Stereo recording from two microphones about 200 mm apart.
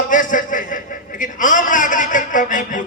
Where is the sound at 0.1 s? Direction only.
40° left (ahead or behind).